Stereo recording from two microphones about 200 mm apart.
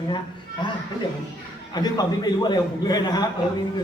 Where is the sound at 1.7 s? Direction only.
20° left (ahead or behind).